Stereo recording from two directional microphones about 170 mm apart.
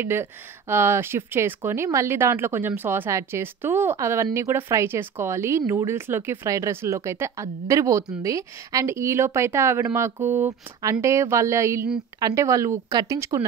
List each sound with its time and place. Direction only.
0.0 s speech: 15° right (ahead or behind)